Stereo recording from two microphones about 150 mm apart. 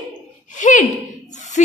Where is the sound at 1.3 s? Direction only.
55° left (ahead or behind).